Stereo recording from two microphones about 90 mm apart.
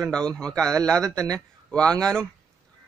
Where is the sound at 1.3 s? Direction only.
10° left (ahead or behind).